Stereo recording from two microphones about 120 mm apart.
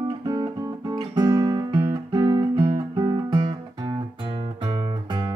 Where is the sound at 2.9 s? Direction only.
30° right (ahead or behind).